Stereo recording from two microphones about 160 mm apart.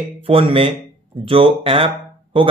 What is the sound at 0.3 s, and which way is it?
Speech, 35° right (ahead or behind).